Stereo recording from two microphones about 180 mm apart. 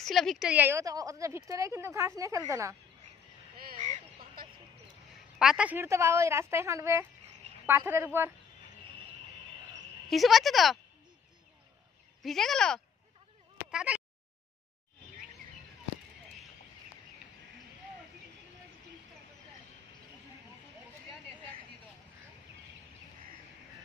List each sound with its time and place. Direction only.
0.0 s a woman's voice: centre (ahead or behind); by 2.7 s 15° right (ahead or behind)
3.8 s a sound: 45° right (ahead or behind)
5.4 s a woman's voice: 5° right (ahead or behind)
10.0 s speech: centre (ahead or behind)
12.2 s speech: centre (ahead or behind)
13.7 s a sound: 5° right (ahead or behind)